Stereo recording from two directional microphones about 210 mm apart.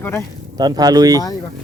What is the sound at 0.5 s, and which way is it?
Speech, 20° right (ahead or behind).